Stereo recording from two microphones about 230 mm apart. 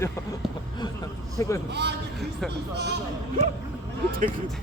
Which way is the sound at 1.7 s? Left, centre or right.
Right.